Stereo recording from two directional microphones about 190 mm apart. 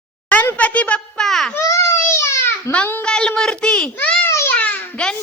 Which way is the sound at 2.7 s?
10° left (ahead or behind).